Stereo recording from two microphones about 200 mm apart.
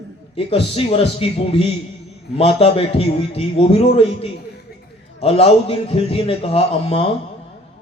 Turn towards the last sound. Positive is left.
turn(degrees=30)  # may be behind; listen again after turning